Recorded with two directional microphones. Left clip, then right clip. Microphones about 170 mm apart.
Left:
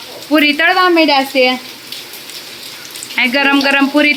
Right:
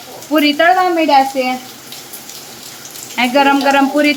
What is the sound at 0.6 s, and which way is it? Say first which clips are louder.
Speech: right 1 dB; 25° left (ahead or behind).